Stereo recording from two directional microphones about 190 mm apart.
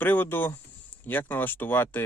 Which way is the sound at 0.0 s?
10° left (ahead or behind).